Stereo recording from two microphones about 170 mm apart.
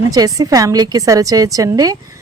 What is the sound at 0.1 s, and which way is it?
Speech, 20° right (ahead or behind).